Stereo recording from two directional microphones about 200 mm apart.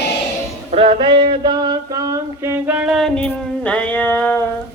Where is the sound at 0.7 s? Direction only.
30° right (ahead or behind); by 4.4 s 10° left (ahead or behind).